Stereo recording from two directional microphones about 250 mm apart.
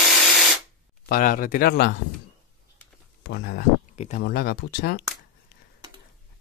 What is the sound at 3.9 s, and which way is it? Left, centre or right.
Speech, left.